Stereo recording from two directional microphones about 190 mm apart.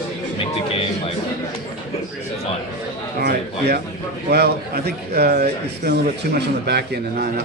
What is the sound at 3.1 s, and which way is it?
A man's voice, 55° right (ahead or behind).